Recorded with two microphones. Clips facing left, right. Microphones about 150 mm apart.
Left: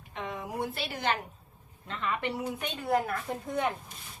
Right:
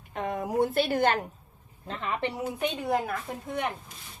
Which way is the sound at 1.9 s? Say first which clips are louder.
Right 1 dB; 25° right (ahead or behind).